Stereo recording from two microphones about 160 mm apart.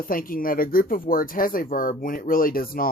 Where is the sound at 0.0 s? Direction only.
60° left (ahead or behind).